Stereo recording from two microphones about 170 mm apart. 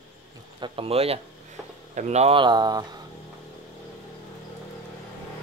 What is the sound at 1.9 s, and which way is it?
Speech, 40° right (ahead or behind).